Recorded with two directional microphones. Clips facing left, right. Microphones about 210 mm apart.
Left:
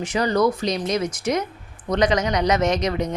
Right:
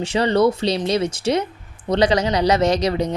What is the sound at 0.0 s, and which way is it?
A woman's voice, 30° right (ahead or behind).